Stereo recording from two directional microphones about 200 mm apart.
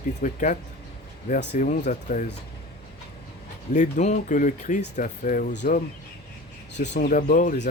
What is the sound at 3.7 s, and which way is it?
Speech, 35° left (ahead or behind).